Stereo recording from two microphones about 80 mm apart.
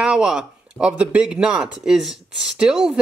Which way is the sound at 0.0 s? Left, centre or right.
Centre.